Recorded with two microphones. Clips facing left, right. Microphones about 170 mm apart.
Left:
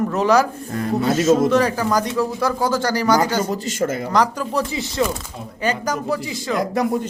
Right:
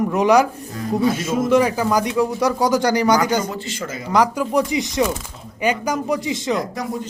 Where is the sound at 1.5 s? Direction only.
10° right (ahead or behind).